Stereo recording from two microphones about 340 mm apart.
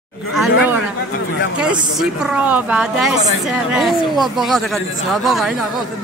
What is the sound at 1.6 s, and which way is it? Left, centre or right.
A woman's voice, centre.